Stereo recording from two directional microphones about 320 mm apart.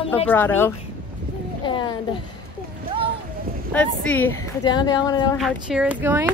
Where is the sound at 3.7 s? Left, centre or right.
Centre.